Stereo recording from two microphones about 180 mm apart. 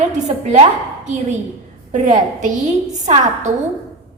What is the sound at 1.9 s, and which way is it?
A woman's voice, 40° right (ahead or behind).